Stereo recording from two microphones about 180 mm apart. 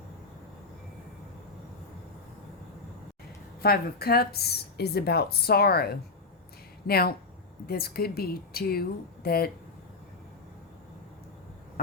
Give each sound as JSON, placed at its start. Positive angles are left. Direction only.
{"t": 3.6, "sound": "speech", "side_deg": 60}